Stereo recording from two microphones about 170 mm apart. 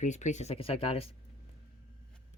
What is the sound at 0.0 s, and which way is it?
Speech, 45° left (ahead or behind).